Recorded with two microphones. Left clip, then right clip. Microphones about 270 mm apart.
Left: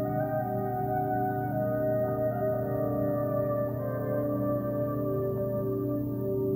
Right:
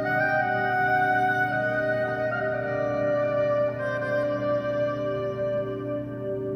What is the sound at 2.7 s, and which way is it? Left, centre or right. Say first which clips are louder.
Music: right 5 dB; right.